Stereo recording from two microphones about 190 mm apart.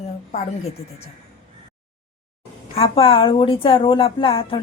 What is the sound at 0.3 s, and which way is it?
Speech, 40° left (ahead or behind).